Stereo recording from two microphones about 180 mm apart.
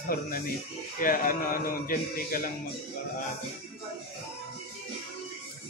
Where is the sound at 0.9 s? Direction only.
50° left (ahead or behind).